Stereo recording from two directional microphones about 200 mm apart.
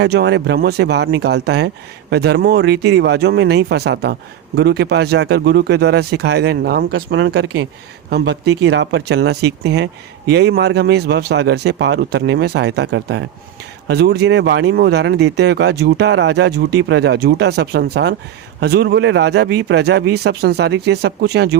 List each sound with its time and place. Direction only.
0.0 s speech: 60° right (ahead or behind)